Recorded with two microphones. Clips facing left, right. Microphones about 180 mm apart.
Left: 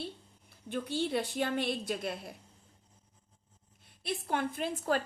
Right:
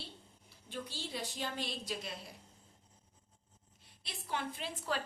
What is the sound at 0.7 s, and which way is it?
A woman's voice, 60° left (ahead or behind).